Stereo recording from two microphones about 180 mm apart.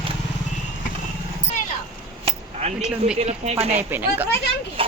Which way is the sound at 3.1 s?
35° right (ahead or behind).